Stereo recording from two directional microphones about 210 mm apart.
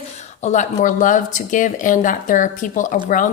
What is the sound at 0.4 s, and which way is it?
Speech, 35° left (ahead or behind).